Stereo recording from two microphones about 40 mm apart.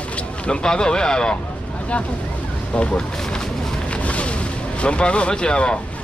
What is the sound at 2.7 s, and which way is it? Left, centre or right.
Speech, left.